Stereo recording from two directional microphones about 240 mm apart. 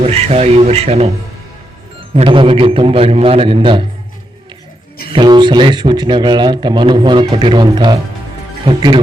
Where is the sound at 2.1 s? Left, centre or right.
Right.